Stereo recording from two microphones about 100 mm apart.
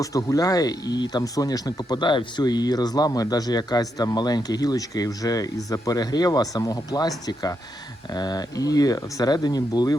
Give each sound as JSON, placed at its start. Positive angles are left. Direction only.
{"t": 0.0, "sound": "speech", "side_deg": 35}
{"t": 8.1, "sound": "speech", "side_deg": 40}